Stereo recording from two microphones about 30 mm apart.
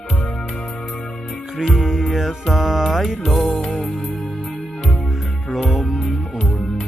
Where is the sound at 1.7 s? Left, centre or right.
Centre.